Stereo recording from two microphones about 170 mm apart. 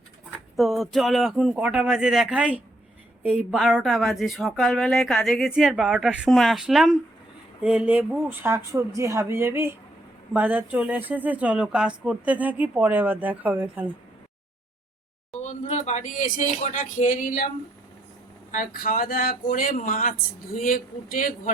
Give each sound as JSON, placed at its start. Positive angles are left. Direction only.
{"t": 0.5, "sound": "speech", "side_deg": 0}
{"t": 15.3, "sound": "speech", "side_deg": 40}
{"t": 18.5, "sound": "speech", "side_deg": 55}